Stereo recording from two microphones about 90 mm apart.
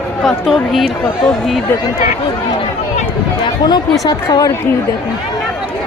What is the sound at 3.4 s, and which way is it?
A woman's voice, 50° left (ahead or behind).